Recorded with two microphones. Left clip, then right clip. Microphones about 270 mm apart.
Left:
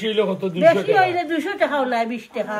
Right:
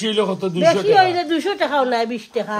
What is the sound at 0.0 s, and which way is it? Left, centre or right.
Speech, centre.